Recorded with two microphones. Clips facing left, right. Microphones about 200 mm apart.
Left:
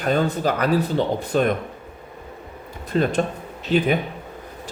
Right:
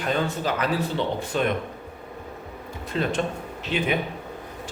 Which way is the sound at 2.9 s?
45° left (ahead or behind).